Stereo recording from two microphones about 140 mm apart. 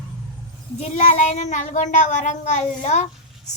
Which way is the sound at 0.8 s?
55° left (ahead or behind).